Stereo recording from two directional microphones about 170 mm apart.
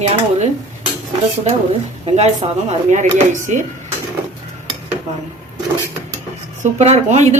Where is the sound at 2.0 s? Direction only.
40° right (ahead or behind).